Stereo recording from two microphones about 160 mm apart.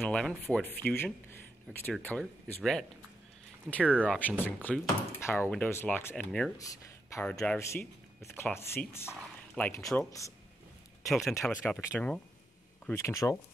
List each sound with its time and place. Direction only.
0.0 s speech: 5° left (ahead or behind)
3.8 s speech: 5° right (ahead or behind)
4.5 s speech: 10° left (ahead or behind)
11.1 s speech: centre (ahead or behind); by 13.4 s 20° left (ahead or behind)